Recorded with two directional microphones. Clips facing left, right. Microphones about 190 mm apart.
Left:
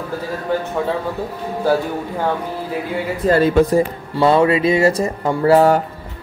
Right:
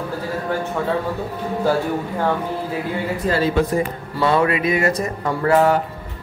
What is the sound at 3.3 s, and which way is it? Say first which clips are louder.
Speech: left 6 dB; 55° left (ahead or behind).